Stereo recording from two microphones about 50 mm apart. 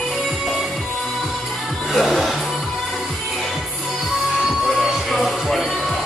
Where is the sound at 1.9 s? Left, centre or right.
Centre.